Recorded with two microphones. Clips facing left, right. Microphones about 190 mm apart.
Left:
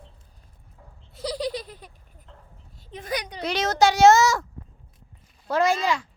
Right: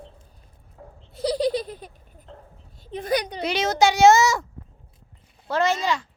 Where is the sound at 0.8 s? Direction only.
45° right (ahead or behind).